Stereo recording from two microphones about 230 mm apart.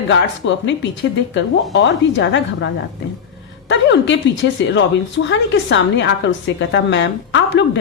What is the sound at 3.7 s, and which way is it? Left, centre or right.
A woman's voice, left.